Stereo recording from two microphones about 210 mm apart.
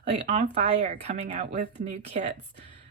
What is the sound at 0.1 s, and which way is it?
A woman's voice, 30° right (ahead or behind).